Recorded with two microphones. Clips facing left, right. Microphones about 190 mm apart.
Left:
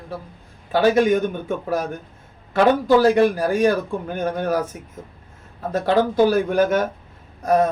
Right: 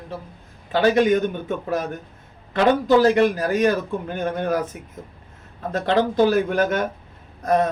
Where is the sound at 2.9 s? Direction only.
10° left (ahead or behind).